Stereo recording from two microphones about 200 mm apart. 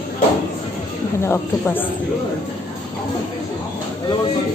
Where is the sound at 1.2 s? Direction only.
10° left (ahead or behind).